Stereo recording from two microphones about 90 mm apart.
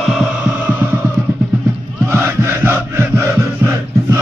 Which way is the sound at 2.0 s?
30° right (ahead or behind).